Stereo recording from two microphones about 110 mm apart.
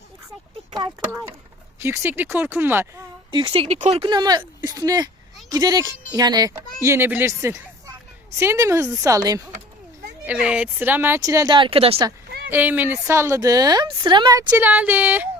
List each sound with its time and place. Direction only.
1.8 s speech: 25° right (ahead or behind)
3.3 s speech: 40° right (ahead or behind)
3.6 s speech: 80° right
4.0 s speech: 45° right (ahead or behind)
6.8 s speech: 25° right (ahead or behind)
10.2 s speech: 10° right (ahead or behind)
11.2 s speech: 30° right (ahead or behind)
11.5 s a woman's voice: 55° right (ahead or behind)
12.5 s speech: 15° right (ahead or behind); by 14.3 s 45° right (ahead or behind)
14.6 s speech: 15° right (ahead or behind)